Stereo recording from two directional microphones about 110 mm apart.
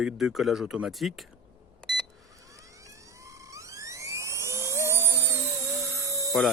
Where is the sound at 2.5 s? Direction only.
30° right (ahead or behind).